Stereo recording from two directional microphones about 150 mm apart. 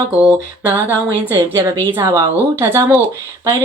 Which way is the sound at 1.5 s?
25° right (ahead or behind).